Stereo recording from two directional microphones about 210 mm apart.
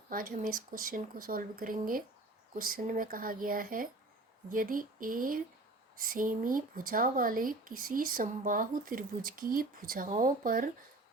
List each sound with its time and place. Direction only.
0.1 s speech: 40° right (ahead or behind)